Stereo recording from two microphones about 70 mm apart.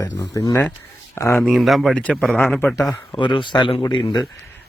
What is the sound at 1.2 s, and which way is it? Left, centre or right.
Speech, left.